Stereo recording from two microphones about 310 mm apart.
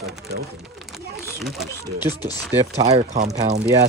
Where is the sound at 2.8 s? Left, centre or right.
Right.